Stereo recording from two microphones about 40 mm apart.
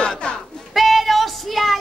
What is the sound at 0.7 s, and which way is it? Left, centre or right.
Music, centre.